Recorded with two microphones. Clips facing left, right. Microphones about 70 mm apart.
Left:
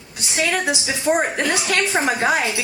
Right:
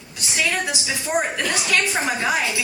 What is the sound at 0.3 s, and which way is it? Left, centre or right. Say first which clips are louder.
A woman's voice: left 3 dB; left.